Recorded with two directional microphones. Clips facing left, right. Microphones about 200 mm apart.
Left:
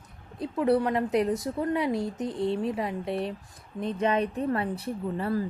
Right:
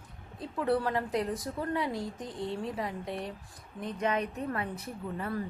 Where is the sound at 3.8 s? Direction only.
30° left (ahead or behind).